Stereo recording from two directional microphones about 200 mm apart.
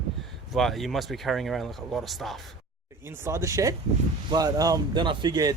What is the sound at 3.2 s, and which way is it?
Speech, 15° right (ahead or behind).